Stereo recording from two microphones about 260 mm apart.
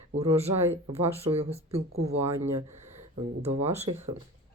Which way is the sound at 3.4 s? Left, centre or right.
Right.